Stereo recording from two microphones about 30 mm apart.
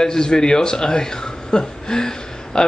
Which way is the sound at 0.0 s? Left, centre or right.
Left.